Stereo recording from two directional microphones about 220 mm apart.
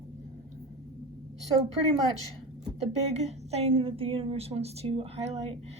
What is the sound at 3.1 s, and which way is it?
A woman's voice, 30° right (ahead or behind).